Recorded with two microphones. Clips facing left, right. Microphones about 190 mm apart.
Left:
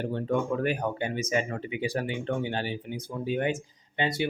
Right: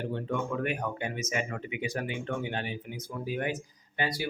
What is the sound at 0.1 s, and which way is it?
Speech, 35° left (ahead or behind).